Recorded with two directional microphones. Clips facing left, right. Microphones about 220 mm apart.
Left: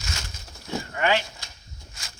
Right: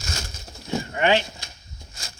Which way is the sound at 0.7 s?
20° right (ahead or behind).